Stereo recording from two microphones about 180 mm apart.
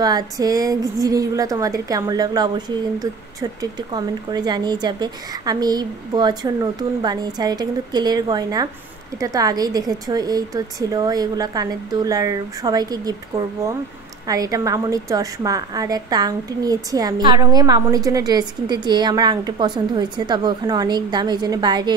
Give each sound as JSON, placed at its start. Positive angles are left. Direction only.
{"t": 0.0, "sound": "a woman's voice", "side_deg": -20}
{"t": 14.2, "sound": "a woman's voice", "side_deg": -20}